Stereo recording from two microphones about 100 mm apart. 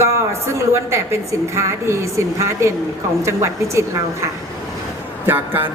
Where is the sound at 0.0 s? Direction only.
30° right (ahead or behind).